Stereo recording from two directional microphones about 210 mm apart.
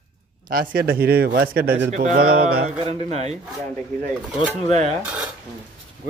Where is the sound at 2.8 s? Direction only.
30° right (ahead or behind).